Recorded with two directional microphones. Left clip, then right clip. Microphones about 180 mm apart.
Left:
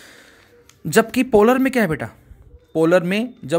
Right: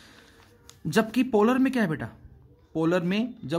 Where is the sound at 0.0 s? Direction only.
25° left (ahead or behind).